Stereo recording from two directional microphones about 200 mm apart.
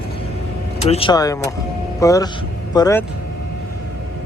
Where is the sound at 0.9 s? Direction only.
25° left (ahead or behind).